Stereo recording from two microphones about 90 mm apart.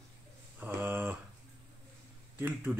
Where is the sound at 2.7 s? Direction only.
5° right (ahead or behind).